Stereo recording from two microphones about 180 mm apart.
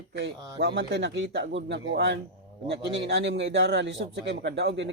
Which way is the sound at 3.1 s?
75° right (ahead or behind).